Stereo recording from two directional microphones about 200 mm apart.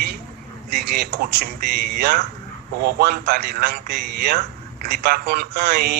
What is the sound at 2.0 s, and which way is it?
A man's voice, 55° right (ahead or behind).